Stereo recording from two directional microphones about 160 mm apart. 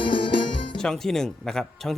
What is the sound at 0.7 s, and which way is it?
Speech, 5° left (ahead or behind).